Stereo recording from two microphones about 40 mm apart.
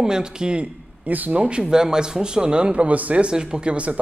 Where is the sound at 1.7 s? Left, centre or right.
Centre.